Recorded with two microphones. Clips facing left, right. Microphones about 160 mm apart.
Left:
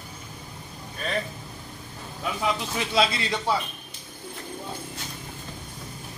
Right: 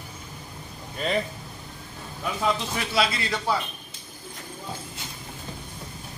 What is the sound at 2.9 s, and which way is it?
Speech, 25° left (ahead or behind).